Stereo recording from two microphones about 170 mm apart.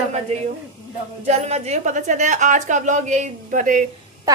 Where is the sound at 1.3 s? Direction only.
40° right (ahead or behind).